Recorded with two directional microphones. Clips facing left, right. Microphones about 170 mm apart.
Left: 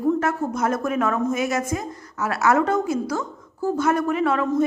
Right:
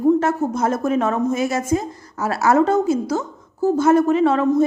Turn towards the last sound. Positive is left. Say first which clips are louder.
# right 5 dB
turn(degrees=-30)  # may be behind; listen again after turning